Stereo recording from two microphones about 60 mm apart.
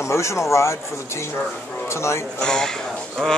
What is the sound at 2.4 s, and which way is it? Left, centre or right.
Speech, centre.